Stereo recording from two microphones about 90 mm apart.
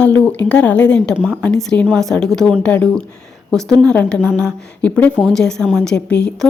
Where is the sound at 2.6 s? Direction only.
20° left (ahead or behind).